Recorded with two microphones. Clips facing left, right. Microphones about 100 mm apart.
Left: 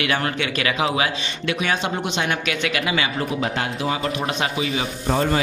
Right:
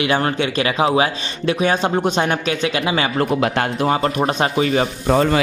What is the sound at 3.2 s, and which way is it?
Speech, 65° right (ahead or behind).